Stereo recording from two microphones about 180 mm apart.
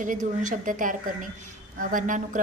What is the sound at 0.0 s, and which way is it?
A woman's voice, 45° right (ahead or behind).